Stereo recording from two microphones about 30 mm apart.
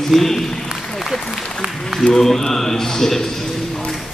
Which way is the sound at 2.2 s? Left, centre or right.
Centre.